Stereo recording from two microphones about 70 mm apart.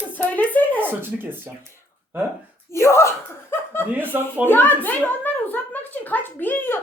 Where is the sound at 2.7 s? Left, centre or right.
Left.